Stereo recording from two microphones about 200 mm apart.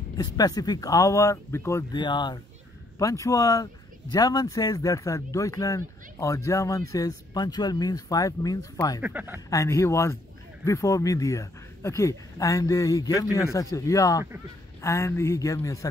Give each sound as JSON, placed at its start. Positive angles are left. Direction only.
{"t": 0.2, "sound": "speech", "side_deg": 20}
{"t": 9.0, "sound": "speech", "side_deg": -10}
{"t": 9.5, "sound": "speech", "side_deg": 15}